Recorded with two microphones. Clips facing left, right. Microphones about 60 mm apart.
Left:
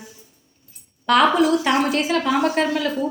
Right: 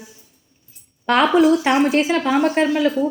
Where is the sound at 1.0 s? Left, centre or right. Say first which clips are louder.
Right 2 dB; right.